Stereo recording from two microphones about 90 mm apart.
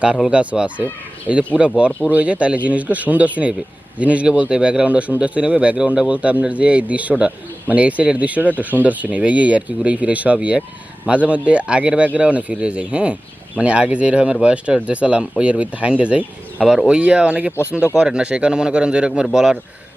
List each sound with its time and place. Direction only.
0.0 s a man's voice: 10° right (ahead or behind)